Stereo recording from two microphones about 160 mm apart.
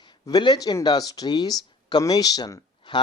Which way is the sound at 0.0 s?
25° left (ahead or behind).